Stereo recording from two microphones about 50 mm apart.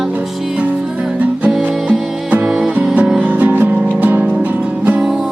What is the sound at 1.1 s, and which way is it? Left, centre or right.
Music, right.